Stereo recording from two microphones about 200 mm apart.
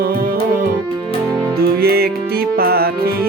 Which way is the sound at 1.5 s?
50° right (ahead or behind).